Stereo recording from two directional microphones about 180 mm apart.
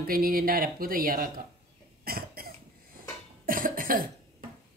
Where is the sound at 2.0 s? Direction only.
55° right (ahead or behind).